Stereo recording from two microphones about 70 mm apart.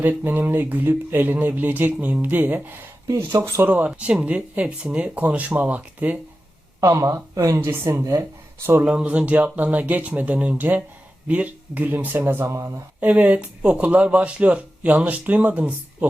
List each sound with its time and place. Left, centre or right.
0.3 s speech: right
3.2 s speech: right
3.7 s speech: right
6.7 s speech: right
7.6 s speech: right
8.8 s speech: centre
12.5 s speech: right
13.0 s speech: right